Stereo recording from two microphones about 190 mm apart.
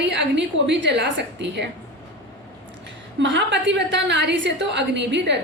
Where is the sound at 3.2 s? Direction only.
65° right (ahead or behind).